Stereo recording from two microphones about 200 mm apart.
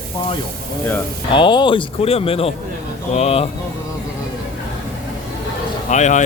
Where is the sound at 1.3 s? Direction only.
25° left (ahead or behind).